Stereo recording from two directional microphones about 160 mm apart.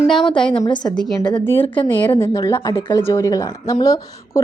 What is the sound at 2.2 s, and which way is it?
A woman's voice, 15° left (ahead or behind).